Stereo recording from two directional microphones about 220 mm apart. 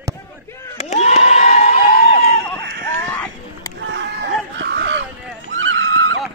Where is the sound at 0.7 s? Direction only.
30° left (ahead or behind).